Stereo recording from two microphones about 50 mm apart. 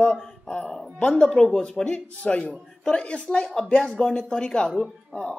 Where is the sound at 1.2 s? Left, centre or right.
Centre.